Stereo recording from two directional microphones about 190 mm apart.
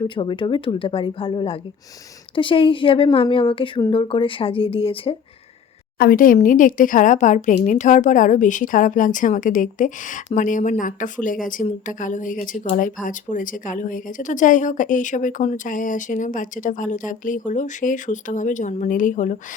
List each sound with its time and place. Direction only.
0.0 s a woman's voice: 25° left (ahead or behind)
6.0 s speech: 45° left (ahead or behind)